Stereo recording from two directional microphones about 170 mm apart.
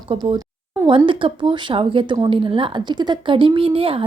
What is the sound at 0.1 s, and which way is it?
A woman's voice, 30° right (ahead or behind).